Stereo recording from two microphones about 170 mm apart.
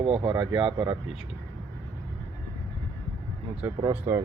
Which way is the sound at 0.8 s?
35° right (ahead or behind).